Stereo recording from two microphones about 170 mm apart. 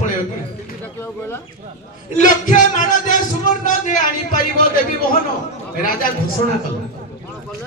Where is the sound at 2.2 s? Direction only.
50° left (ahead or behind).